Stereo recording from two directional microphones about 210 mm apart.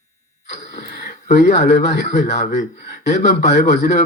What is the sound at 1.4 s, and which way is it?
Speech, 30° left (ahead or behind).